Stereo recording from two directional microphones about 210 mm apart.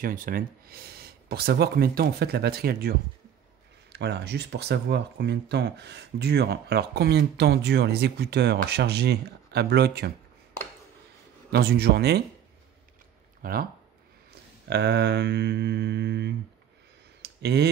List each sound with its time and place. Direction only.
0.0 s speech: 40° right (ahead or behind)
11.5 s speech: 50° right (ahead or behind)
13.4 s speech: 45° right (ahead or behind)
14.7 s speech: 55° right (ahead or behind)
17.2 s a sound: 55° right (ahead or behind)